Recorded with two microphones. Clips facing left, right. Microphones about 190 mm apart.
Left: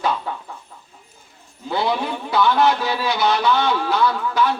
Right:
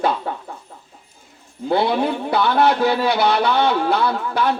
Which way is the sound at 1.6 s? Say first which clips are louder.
Right 4 dB; 55° right (ahead or behind).